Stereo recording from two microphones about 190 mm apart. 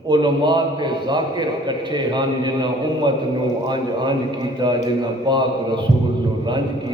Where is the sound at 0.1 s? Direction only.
25° right (ahead or behind).